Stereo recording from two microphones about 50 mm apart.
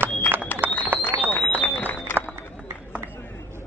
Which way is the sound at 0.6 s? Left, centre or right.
Right.